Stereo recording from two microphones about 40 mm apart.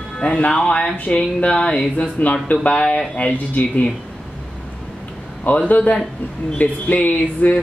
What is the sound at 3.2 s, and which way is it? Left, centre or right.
Speech, left.